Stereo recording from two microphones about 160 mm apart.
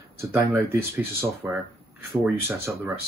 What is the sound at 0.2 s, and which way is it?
Speech, 15° right (ahead or behind).